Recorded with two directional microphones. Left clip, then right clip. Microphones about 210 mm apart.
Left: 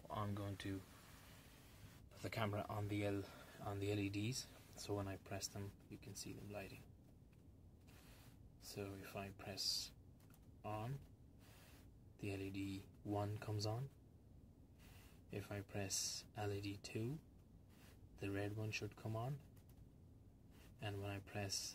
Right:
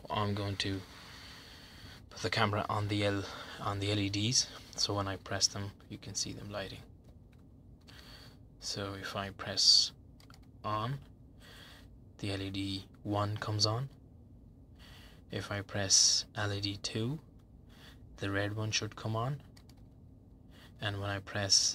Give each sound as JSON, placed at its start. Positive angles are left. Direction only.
{"t": 0.1, "sound": "speech", "side_deg": -10}
{"t": 2.0, "sound": "speech", "side_deg": -15}
{"t": 8.7, "sound": "speech", "side_deg": -15}
{"t": 10.6, "sound": "speech", "side_deg": -15}
{"t": 12.2, "sound": "speech", "side_deg": -15}
{"t": 15.2, "sound": "speech", "side_deg": -15}
{"t": 18.1, "sound": "speech", "side_deg": -15}
{"t": 20.8, "sound": "speech", "side_deg": -15}